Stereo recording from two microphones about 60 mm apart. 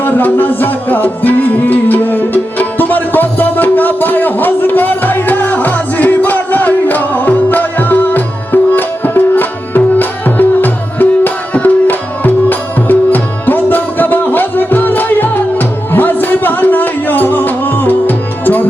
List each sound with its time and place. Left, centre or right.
0.0 s music: left